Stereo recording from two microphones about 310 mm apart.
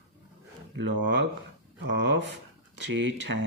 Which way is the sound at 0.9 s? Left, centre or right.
Right.